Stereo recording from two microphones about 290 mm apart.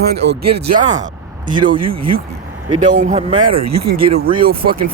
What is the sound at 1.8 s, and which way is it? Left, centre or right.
Speech, right.